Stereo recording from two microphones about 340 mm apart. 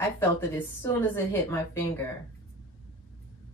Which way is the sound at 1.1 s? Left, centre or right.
Centre.